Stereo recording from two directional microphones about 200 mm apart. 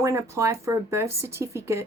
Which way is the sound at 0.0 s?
15° right (ahead or behind).